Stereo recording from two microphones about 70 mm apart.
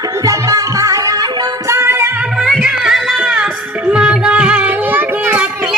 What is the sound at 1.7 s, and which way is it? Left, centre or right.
Music, right.